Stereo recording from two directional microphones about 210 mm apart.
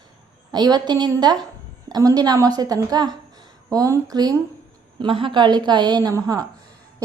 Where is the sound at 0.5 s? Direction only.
20° right (ahead or behind).